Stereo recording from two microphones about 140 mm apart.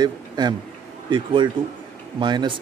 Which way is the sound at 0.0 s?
30° right (ahead or behind).